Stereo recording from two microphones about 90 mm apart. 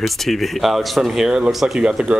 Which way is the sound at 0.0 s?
Centre (ahead or behind).